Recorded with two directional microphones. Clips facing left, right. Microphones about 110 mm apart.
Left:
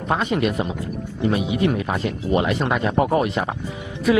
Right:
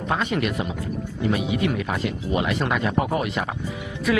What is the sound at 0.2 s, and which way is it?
Speech, 25° left (ahead or behind).